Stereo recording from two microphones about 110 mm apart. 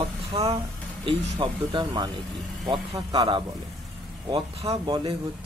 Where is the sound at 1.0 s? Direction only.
50° right (ahead or behind).